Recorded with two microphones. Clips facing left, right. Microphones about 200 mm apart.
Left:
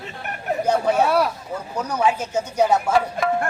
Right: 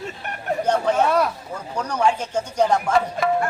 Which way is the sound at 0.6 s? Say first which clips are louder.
Left 1 dB; 10° left (ahead or behind).